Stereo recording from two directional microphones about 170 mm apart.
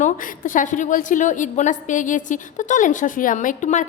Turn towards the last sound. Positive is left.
turn(degrees=45)  # may be behind; listen again after turning